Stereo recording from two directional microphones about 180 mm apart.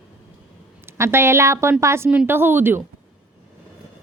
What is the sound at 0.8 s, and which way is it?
A woman's voice, 15° right (ahead or behind).